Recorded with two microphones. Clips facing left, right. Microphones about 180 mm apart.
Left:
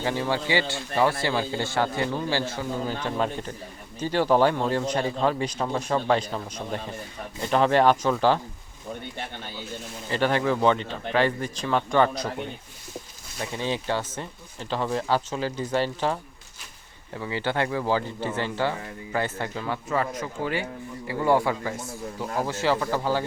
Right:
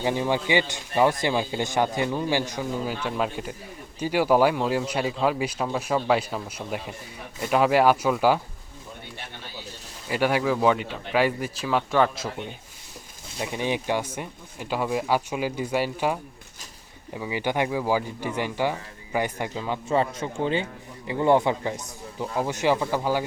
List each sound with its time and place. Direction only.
0.0 s speech: 15° right (ahead or behind)
10.1 s speech: 10° right (ahead or behind)
13.4 s speech: 15° right (ahead or behind)
17.2 s speech: 15° right (ahead or behind)